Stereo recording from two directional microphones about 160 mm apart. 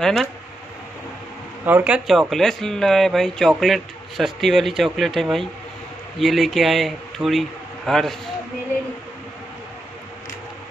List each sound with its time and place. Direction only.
0.0 s speech: centre (ahead or behind)
1.7 s speech: 10° right (ahead or behind)
2.0 s speech: centre (ahead or behind)